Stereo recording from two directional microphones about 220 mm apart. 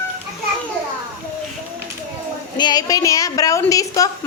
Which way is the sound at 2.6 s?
20° left (ahead or behind).